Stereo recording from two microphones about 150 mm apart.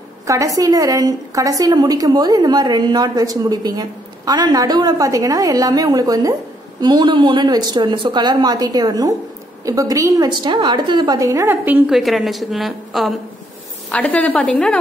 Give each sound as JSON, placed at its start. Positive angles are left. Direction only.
{"t": 0.3, "sound": "a woman's voice", "side_deg": -20}
{"t": 11.9, "sound": "a woman's voice", "side_deg": 0}